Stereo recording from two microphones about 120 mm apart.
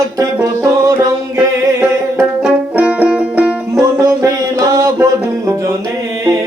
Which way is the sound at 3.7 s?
30° right (ahead or behind).